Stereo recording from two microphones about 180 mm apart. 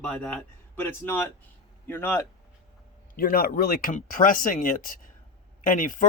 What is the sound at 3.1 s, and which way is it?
Speech, 55° left (ahead or behind).